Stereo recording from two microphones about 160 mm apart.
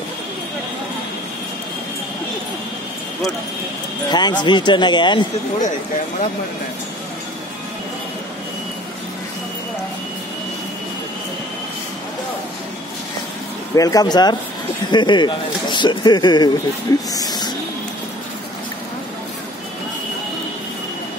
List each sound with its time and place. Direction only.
4.1 s speech: 25° left (ahead or behind)
13.7 s speech: 20° left (ahead or behind)